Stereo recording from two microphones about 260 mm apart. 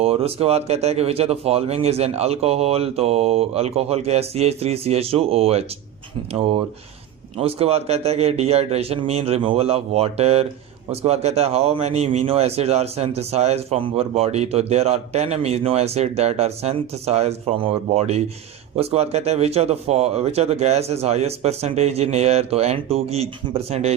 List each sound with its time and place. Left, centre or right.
0.0 s a man's voice: right